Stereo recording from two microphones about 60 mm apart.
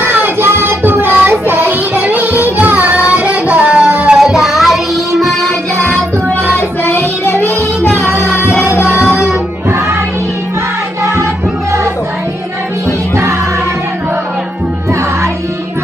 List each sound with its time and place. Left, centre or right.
0.0 s child singing: right
2.0 s music: right
4.2 s music: centre
6.3 s music: left
9.7 s music: right
13.1 s music: right